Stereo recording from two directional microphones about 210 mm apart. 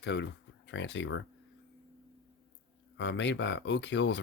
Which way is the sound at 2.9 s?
55° left (ahead or behind).